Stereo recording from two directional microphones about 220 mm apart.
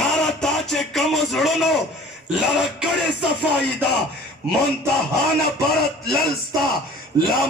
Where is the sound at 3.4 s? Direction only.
50° left (ahead or behind).